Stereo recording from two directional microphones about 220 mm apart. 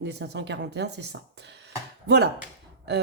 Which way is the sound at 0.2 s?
50° right (ahead or behind).